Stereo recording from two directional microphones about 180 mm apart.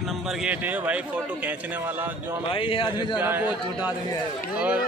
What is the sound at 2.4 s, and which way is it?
Speech, 30° left (ahead or behind).